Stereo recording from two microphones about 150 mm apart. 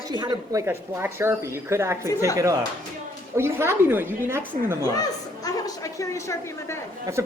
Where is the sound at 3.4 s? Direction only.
15° right (ahead or behind).